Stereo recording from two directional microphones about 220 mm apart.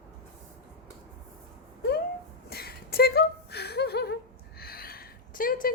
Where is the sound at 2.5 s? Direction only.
45° left (ahead or behind).